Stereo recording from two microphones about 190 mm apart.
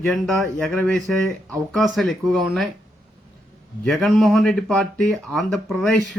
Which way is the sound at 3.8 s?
Centre (ahead or behind).